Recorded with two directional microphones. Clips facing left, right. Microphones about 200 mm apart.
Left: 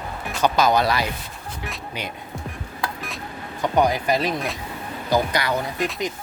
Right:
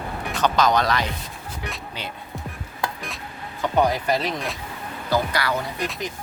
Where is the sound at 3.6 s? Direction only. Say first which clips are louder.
Left 1 dB; 10° left (ahead or behind).